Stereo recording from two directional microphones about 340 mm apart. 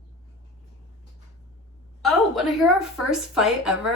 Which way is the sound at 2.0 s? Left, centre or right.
Centre.